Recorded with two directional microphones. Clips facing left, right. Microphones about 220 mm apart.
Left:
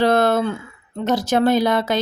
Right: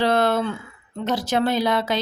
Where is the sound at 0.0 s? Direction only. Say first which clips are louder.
Left 3 dB; 45° left (ahead or behind).